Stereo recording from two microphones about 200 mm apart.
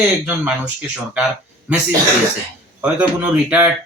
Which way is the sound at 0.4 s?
5° right (ahead or behind).